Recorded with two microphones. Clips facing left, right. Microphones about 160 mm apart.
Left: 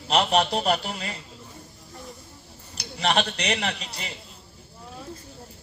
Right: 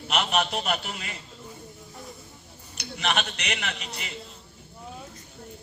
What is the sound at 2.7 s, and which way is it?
A man's voice, 35° left (ahead or behind).